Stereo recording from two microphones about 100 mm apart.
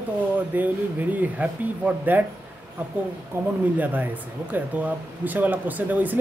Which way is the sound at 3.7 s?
15° right (ahead or behind).